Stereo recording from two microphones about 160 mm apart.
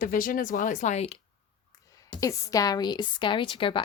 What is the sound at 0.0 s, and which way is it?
Speech, 60° left (ahead or behind).